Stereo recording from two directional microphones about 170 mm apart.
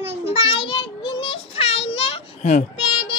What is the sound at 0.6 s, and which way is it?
Child singing, 30° left (ahead or behind).